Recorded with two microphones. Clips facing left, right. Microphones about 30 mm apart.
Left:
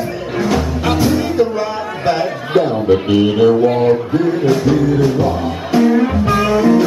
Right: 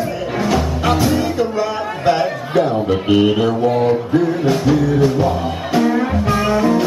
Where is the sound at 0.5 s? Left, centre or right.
Centre.